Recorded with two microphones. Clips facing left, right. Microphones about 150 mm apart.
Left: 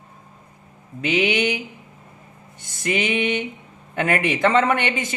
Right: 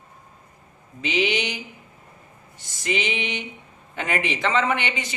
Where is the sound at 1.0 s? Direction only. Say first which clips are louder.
Left 4 dB; 55° left (ahead or behind).